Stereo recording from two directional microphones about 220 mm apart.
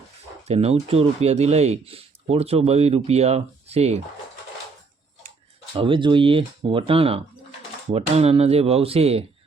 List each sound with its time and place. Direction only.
0.4 s speech: 30° right (ahead or behind)
5.7 s speech: 25° right (ahead or behind)